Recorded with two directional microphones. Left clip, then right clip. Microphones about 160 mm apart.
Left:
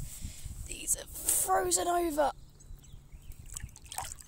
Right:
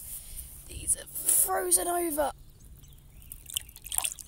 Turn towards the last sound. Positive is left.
turn(degrees=15)  # may be behind; listen again after turning